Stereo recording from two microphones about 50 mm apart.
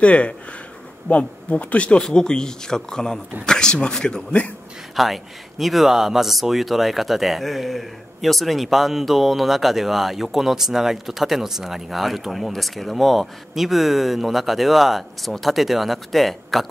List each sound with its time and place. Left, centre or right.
0.0 s speech: left
4.9 s a man's voice: centre